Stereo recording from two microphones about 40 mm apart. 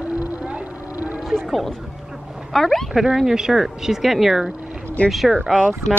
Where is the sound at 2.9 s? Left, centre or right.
Centre.